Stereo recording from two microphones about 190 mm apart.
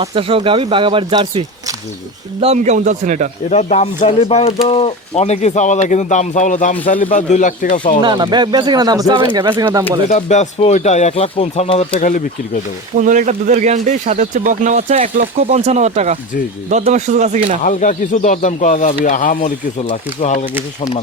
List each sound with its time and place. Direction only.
0.0 s speech: 30° right (ahead or behind)
3.5 s speech: 35° left (ahead or behind)
8.0 s speech: 25° right (ahead or behind)
10.1 s speech: 40° left (ahead or behind)
11.9 s speech: 45° left (ahead or behind)
13.0 s speech: 40° right (ahead or behind)
17.6 s speech: 45° left (ahead or behind)